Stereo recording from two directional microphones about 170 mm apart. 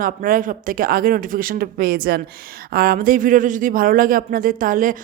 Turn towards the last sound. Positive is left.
turn(degrees=-50)  # may be behind; listen again after turning